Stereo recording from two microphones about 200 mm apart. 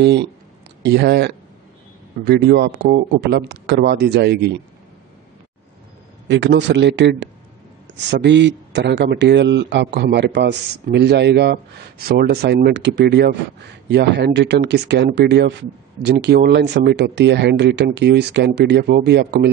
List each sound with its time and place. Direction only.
0.8 s a man's voice: 55° right (ahead or behind)
6.2 s a man's voice: 65° right (ahead or behind)